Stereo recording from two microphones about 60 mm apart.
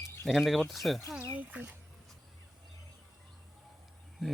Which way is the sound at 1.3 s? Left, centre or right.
Right.